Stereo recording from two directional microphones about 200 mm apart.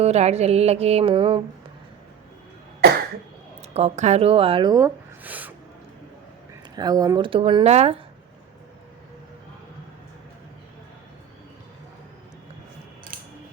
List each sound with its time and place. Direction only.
0.0 s music: 35° right (ahead or behind)
3.8 s speech: 35° right (ahead or behind); by 5.5 s 10° right (ahead or behind)
6.7 s speech: 20° right (ahead or behind)
13.1 s a sound: 45° right (ahead or behind)